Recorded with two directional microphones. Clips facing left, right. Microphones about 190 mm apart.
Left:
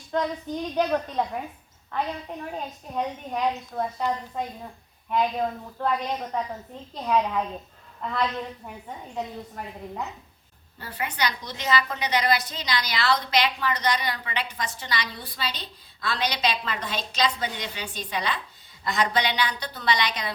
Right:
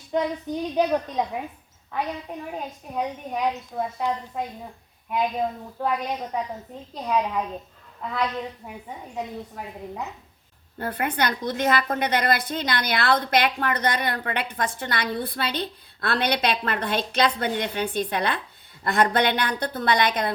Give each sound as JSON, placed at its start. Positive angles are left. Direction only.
{"t": 0.1, "sound": "a woman's voice", "side_deg": -10}
{"t": 2.5, "sound": "a woman's voice", "side_deg": -5}
{"t": 5.8, "sound": "a woman's voice", "side_deg": -10}
{"t": 8.6, "sound": "a woman's voice", "side_deg": -5}
{"t": 10.8, "sound": "a woman's voice", "side_deg": -55}